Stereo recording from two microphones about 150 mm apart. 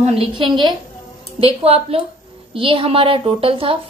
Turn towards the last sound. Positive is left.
turn(degrees=-35)  # may be behind; listen again after turning